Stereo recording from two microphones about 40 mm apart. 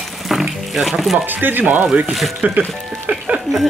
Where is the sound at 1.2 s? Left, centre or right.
Right.